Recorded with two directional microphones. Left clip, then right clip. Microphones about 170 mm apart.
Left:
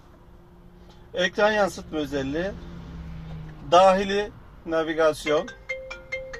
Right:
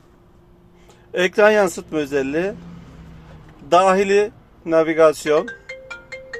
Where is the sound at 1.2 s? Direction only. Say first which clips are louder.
Right 7 dB; 90° right.